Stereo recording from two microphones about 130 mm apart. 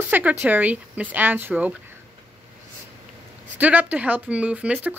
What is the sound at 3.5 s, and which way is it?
Speech, 10° right (ahead or behind).